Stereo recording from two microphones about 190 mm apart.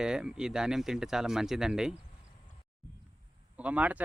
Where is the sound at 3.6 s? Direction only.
5° right (ahead or behind).